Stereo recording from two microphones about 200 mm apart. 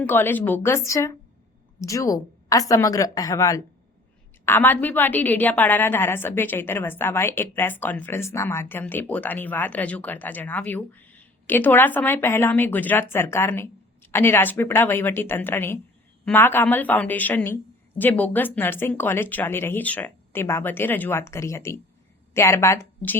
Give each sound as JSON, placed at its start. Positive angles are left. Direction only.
{"t": 0.0, "sound": "a woman's voice", "side_deg": 10}